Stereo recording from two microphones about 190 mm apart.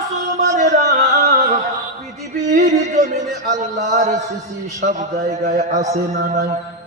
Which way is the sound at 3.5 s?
40° right (ahead or behind).